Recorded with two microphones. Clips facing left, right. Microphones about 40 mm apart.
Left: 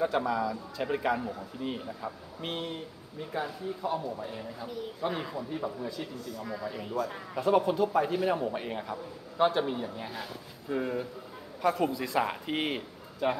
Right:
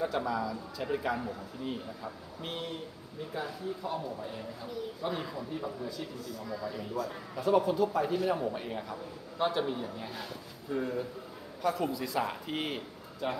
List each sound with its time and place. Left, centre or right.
0.0 s a man's voice: centre
3.3 s a man's voice: centre
10.7 s a man's voice: centre